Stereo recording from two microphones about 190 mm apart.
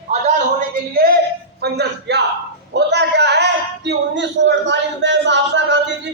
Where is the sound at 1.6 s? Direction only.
60° right (ahead or behind).